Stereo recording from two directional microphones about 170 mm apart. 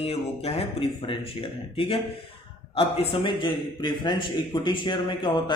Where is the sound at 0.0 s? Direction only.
35° left (ahead or behind).